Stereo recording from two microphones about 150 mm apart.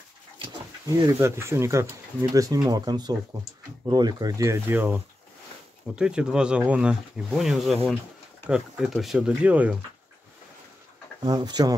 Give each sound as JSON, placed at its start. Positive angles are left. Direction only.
{"t": 0.8, "sound": "speech", "side_deg": -20}
{"t": 11.2, "sound": "speech", "side_deg": -30}